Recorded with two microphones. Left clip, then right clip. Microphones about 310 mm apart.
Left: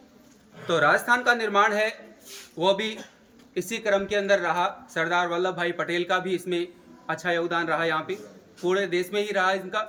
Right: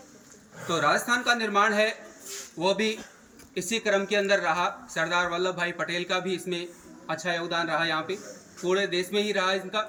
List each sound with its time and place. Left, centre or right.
0.7 s a man's voice: centre
3.5 s a man's voice: centre